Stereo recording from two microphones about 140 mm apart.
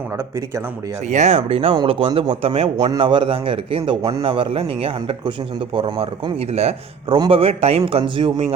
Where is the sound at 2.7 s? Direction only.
30° right (ahead or behind).